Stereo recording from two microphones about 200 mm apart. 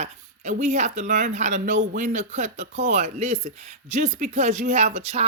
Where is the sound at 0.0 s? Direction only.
35° right (ahead or behind).